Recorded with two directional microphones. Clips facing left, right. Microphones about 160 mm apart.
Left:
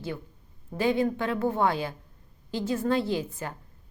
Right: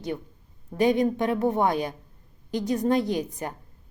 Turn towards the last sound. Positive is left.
turn(degrees=-15)  # may be behind; listen again after turning